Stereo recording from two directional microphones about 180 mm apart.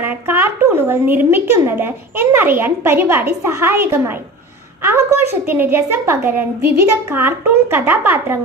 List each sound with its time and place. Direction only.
0.0 s a woman's voice: 10° right (ahead or behind)